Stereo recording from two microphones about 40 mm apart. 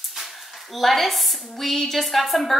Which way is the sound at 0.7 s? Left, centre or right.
Centre.